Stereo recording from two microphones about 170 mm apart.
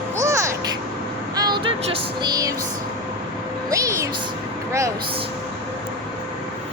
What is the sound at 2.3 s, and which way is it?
Music, 20° right (ahead or behind).